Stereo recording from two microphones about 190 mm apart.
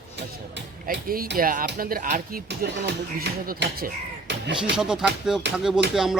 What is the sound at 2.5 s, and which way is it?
Speech, 65° right (ahead or behind).